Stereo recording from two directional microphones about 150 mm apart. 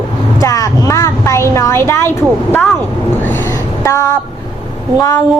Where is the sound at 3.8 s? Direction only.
20° left (ahead or behind).